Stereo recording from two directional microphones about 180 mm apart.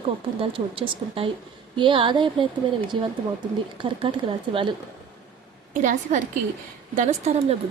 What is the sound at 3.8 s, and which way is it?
Speech, 30° right (ahead or behind).